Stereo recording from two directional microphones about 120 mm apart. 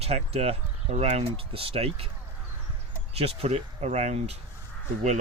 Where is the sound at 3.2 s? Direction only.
60° right (ahead or behind).